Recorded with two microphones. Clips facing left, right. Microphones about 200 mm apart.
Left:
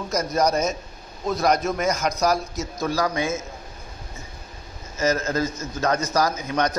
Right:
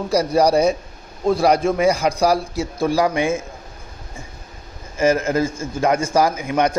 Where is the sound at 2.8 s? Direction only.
10° right (ahead or behind).